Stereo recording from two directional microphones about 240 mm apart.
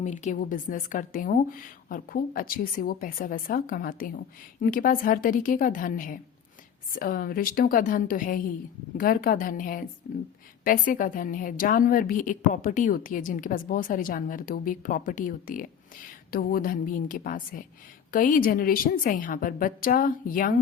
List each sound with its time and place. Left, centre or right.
0.0 s a woman's voice: left